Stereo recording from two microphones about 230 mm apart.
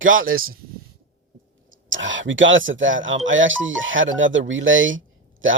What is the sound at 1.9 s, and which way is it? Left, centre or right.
Speech, right.